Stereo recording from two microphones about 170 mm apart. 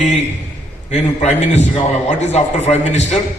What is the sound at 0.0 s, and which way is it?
A man's voice, 40° left (ahead or behind).